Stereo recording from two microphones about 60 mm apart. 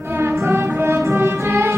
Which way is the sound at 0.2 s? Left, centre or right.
Right.